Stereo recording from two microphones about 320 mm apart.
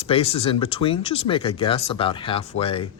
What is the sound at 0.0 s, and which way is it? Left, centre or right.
Speech, centre.